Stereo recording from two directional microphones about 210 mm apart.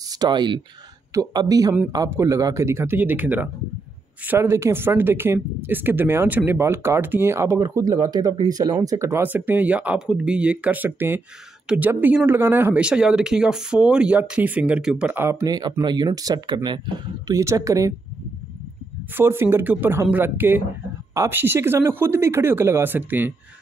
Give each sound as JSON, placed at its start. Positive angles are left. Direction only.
{"t": 0.1, "sound": "speech", "side_deg": -20}
{"t": 19.1, "sound": "speech", "side_deg": -10}